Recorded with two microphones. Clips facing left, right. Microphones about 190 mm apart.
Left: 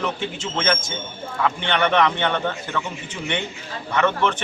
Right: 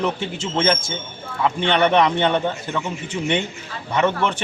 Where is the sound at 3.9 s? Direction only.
15° right (ahead or behind).